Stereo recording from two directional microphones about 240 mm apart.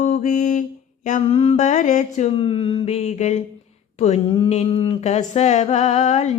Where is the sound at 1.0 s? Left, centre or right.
Left.